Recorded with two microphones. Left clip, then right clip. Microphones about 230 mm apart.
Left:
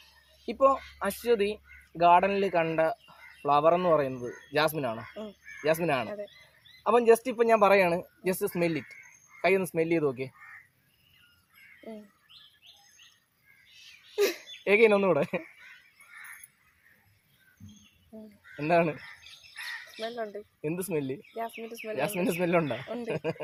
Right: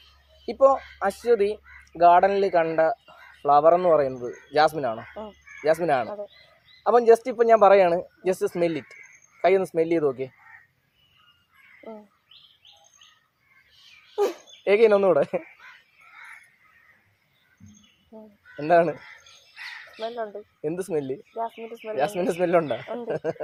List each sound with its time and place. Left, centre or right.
0.4 s speech: left
14.6 s speech: left
18.5 s speech: left
20.0 s speech: left